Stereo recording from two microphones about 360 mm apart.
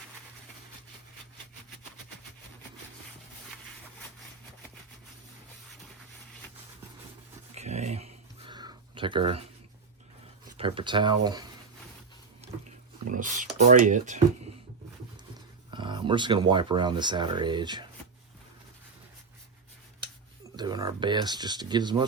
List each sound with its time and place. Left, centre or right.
7.5 s a sound: centre
10.6 s speech: centre
12.4 s sink: centre
13.1 s speech: right
15.7 s speech: centre
20.6 s speech: centre